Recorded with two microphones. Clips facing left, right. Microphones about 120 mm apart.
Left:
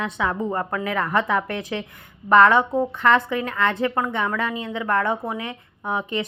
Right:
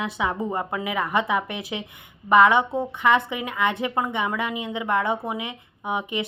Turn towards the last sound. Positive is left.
turn(degrees=-15)  # may be behind; listen again after turning